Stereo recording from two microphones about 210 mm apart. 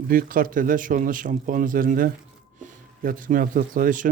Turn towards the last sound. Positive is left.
turn(degrees=-40)  # may be behind; listen again after turning